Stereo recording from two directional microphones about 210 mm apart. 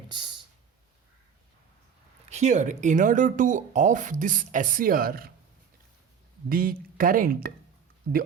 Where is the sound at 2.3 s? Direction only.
35° right (ahead or behind).